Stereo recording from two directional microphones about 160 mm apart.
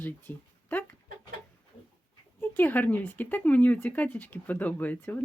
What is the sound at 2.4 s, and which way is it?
Speech, 10° left (ahead or behind).